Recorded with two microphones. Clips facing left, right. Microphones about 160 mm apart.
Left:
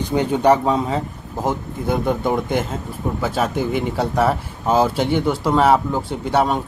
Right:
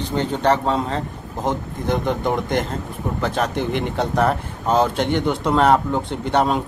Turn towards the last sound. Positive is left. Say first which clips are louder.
# even
turn(degrees=5)  # may be behind; listen again after turning